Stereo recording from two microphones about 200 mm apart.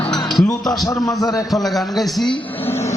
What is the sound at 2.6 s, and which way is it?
Music, 15° left (ahead or behind).